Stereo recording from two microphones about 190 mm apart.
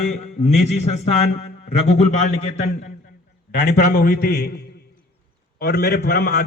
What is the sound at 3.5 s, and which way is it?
A man's voice, 50° left (ahead or behind).